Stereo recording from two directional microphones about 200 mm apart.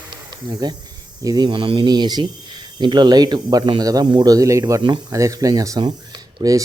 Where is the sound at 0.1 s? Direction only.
20° right (ahead or behind).